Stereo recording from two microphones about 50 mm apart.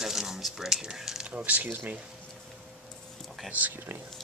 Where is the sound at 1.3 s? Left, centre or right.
Right.